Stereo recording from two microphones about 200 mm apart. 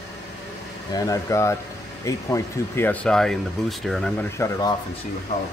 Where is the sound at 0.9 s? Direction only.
15° left (ahead or behind).